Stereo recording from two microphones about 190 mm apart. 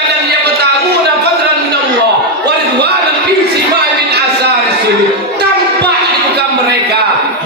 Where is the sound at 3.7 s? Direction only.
60° right (ahead or behind).